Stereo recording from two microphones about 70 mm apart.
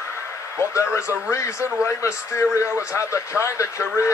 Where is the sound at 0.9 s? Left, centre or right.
Centre.